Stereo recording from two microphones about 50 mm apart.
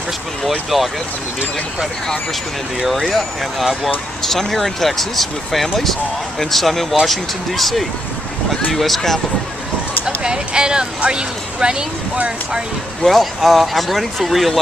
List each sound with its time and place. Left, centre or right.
0.7 s speech: centre
2.9 s speech: centre
10.0 s speech: centre
13.0 s speech: centre